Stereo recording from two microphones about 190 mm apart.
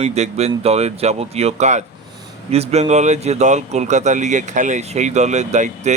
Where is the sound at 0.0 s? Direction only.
35° right (ahead or behind).